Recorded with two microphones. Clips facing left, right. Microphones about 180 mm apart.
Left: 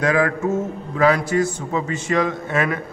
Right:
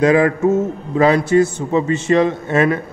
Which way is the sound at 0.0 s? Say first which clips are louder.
Right 6 dB; 25° right (ahead or behind).